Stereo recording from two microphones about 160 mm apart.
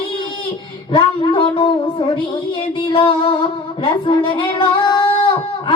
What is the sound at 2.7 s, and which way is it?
Music, 35° left (ahead or behind).